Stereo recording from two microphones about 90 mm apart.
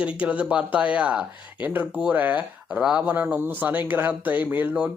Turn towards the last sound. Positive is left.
turn(degrees=-20)  # may be behind; listen again after turning